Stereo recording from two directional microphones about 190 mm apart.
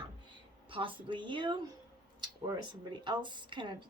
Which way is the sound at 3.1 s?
25° right (ahead or behind).